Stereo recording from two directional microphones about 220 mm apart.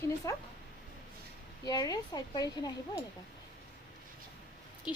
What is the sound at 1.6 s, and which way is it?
A woman's voice, 15° left (ahead or behind).